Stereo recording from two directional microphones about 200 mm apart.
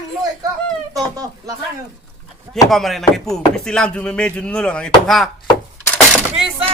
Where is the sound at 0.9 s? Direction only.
15° right (ahead or behind).